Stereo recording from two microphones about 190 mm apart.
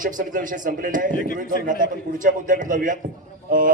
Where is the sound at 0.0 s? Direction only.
45° right (ahead or behind).